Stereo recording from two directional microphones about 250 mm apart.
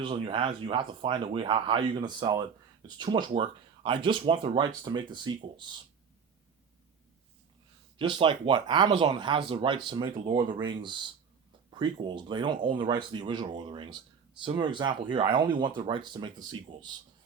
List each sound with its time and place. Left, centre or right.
0.0 s speech: right
7.9 s speech: centre